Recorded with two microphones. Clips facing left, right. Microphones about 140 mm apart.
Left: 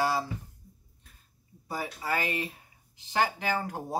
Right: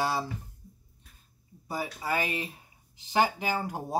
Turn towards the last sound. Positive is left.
turn(degrees=-15)  # may be behind; listen again after turning